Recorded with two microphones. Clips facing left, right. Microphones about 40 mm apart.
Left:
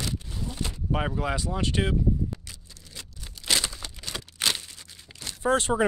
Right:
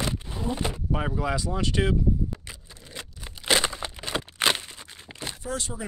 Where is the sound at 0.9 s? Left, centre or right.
Left.